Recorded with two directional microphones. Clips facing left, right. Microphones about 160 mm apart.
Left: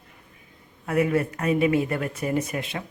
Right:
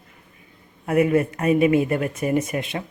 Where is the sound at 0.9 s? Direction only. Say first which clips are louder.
Right 4 dB; 25° right (ahead or behind).